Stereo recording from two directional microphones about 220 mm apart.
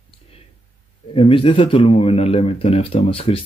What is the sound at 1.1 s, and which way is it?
Speech, 25° left (ahead or behind).